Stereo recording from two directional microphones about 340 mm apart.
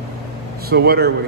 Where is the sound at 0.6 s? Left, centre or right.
Right.